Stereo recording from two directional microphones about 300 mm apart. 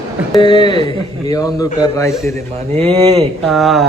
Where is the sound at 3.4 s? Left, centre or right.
Centre.